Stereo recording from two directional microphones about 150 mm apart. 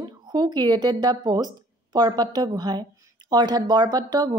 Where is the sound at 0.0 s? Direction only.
30° right (ahead or behind).